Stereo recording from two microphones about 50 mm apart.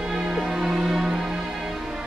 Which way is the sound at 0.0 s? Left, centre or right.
Centre.